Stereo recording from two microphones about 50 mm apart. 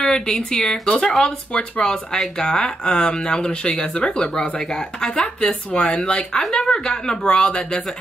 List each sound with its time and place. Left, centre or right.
0.0 s speech: centre